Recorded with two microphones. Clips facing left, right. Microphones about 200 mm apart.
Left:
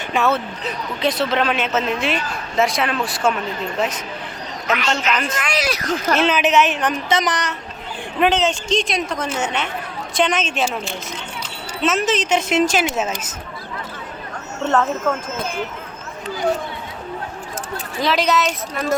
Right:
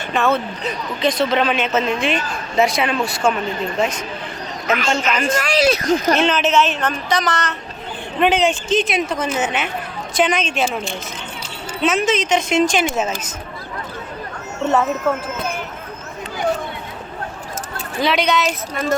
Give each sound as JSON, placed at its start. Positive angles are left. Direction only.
{"t": 0.1, "sound": "a man's voice", "side_deg": 5}
{"t": 5.2, "sound": "speech", "side_deg": -50}
{"t": 5.5, "sound": "a sound", "side_deg": -30}
{"t": 6.1, "sound": "speech", "side_deg": 10}
{"t": 8.3, "sound": "a man's voice", "side_deg": -10}
{"t": 11.8, "sound": "a man's voice", "side_deg": 0}
{"t": 14.7, "sound": "speech", "side_deg": -10}
{"t": 18.0, "sound": "a man's voice", "side_deg": 0}